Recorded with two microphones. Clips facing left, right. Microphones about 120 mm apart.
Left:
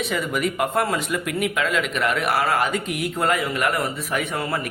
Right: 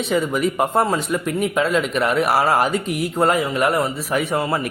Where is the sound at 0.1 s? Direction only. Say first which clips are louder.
Right 4 dB; 30° right (ahead or behind).